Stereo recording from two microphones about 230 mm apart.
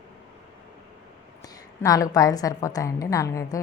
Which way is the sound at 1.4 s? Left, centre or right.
Centre.